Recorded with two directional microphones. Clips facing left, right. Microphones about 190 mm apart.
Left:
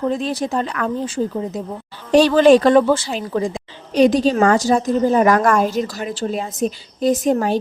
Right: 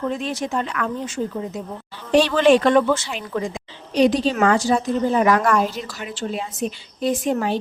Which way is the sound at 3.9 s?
45° left (ahead or behind).